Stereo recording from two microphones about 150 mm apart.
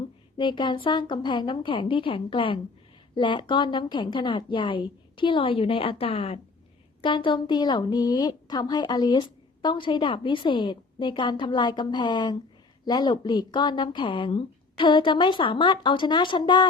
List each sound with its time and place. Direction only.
0.3 s a woman's voice: 30° left (ahead or behind)